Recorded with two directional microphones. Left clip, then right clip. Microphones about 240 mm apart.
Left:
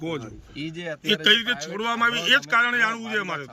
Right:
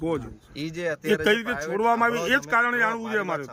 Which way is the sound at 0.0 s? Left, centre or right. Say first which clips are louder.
Right 3 dB; centre.